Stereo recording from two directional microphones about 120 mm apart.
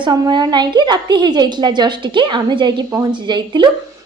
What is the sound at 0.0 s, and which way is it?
A woman's voice, 35° right (ahead or behind).